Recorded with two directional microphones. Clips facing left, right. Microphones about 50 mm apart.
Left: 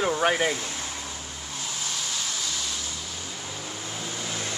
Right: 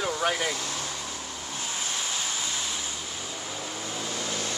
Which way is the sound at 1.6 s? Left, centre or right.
Right.